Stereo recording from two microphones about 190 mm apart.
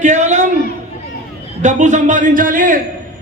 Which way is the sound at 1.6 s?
40° right (ahead or behind).